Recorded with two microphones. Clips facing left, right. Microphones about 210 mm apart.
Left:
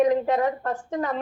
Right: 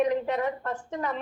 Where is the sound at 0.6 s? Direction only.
40° left (ahead or behind).